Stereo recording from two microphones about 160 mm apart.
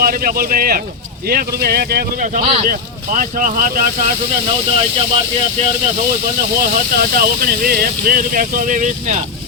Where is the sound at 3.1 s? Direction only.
55° right (ahead or behind).